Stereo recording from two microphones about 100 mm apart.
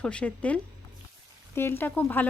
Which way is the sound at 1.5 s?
25° left (ahead or behind).